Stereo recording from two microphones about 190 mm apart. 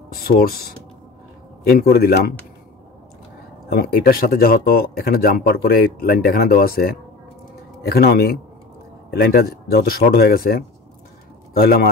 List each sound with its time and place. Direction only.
0.1 s speech: 50° left (ahead or behind)
1.7 s speech: 55° left (ahead or behind)
3.7 s a man's voice: 50° left (ahead or behind)